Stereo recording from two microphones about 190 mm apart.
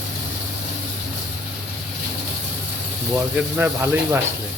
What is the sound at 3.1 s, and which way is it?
Speech, 10° right (ahead or behind).